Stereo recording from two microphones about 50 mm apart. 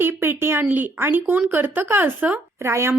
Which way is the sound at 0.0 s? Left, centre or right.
Right.